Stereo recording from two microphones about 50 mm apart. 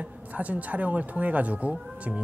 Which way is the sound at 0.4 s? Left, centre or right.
Right.